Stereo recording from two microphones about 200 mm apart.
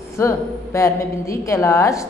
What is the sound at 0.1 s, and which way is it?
Speech, 15° left (ahead or behind).